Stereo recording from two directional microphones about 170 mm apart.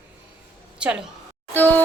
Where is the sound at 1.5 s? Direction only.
10° left (ahead or behind).